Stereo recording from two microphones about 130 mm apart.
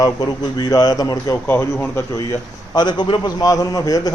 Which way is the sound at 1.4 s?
15° left (ahead or behind).